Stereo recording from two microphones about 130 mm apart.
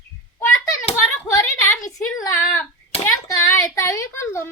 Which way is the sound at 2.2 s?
25° left (ahead or behind).